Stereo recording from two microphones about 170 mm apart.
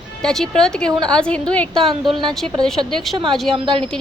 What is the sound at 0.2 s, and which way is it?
Speech, 5° left (ahead or behind).